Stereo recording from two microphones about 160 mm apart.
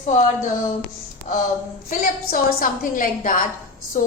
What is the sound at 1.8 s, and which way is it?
A woman's voice, 60° left (ahead or behind).